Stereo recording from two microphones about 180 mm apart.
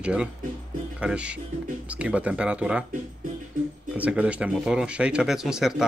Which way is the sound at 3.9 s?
5° right (ahead or behind).